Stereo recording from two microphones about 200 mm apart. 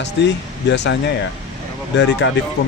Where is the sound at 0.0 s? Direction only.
60° left (ahead or behind).